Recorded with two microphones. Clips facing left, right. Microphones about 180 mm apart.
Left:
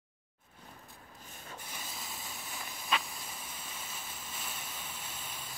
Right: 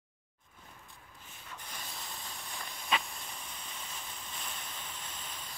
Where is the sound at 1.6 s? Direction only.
5° left (ahead or behind).